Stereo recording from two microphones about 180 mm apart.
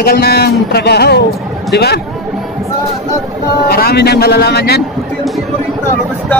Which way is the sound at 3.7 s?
60° left (ahead or behind).